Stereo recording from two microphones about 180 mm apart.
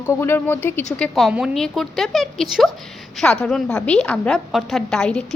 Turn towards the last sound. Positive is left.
turn(degrees=5)  # may be behind; listen again after turning